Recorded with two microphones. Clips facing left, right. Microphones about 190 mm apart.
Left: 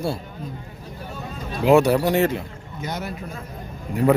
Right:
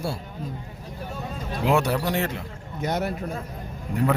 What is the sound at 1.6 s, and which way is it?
Speech, 5° left (ahead or behind).